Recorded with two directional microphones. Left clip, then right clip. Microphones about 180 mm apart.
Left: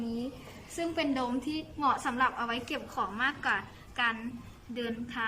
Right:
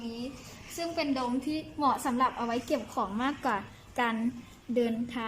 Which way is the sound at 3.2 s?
40° right (ahead or behind).